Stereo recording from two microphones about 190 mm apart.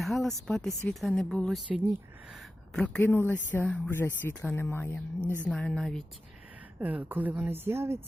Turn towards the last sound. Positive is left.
turn(degrees=-15)  # may be behind; listen again after turning